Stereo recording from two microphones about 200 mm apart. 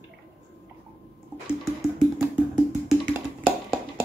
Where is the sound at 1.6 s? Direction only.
Centre (ahead or behind).